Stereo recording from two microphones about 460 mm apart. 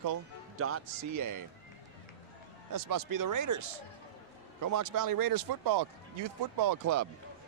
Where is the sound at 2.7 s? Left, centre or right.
Right.